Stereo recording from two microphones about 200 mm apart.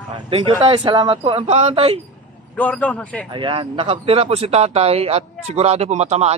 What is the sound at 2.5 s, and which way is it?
Speech, 5° left (ahead or behind).